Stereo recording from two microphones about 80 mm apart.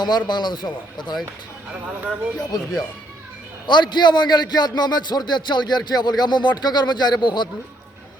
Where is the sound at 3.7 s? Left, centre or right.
Left.